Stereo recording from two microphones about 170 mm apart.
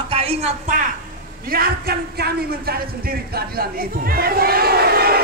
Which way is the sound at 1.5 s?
60° right (ahead or behind).